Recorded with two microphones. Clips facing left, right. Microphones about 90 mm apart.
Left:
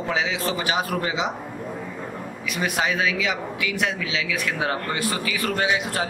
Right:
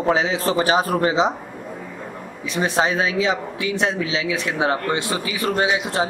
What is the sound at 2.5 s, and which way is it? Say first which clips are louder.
A man's voice: right 4 dB; 30° right (ahead or behind).